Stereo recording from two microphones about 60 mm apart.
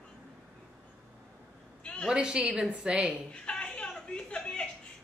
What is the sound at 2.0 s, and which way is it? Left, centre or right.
A woman's voice, centre.